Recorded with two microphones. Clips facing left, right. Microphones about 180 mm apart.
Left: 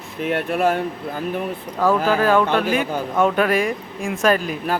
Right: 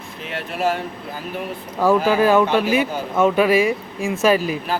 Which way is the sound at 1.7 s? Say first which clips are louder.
Right 2 dB; 10° right (ahead or behind).